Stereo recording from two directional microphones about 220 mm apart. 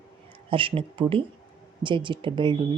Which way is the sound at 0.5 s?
25° right (ahead or behind).